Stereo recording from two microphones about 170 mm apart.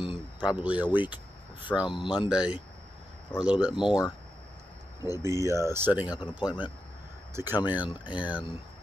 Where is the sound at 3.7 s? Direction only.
25° left (ahead or behind).